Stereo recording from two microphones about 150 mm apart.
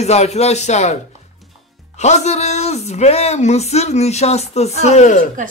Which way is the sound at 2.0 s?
50° left (ahead or behind).